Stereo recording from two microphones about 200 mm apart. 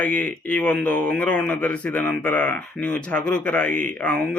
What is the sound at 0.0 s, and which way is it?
Speech, 5° left (ahead or behind).